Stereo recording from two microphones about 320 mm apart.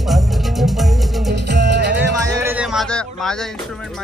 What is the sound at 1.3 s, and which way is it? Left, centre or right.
Music, right.